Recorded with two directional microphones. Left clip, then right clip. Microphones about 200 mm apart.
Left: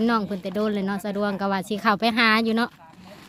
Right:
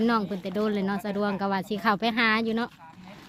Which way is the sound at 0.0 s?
5° left (ahead or behind).